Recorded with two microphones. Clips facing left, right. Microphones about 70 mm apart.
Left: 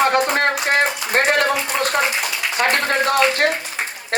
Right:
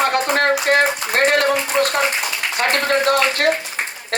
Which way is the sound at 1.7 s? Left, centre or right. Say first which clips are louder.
Right 3 dB; centre.